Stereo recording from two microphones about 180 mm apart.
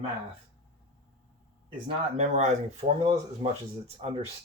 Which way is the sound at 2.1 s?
40° right (ahead or behind).